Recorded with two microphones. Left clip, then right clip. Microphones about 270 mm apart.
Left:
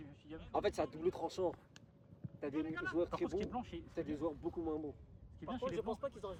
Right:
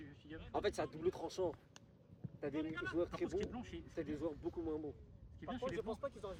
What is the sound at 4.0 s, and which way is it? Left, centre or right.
Speech, left.